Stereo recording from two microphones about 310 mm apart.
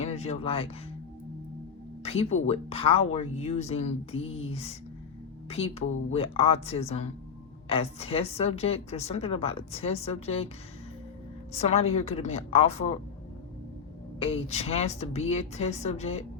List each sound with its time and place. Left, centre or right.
0.0 s speech: centre
2.0 s a woman's voice: centre
11.5 s a woman's voice: centre
14.2 s a woman's voice: centre